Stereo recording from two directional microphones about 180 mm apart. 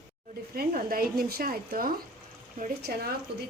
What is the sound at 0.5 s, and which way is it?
Speech, 55° right (ahead or behind).